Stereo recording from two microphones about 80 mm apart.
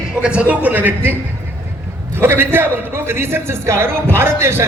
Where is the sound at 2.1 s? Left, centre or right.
Right.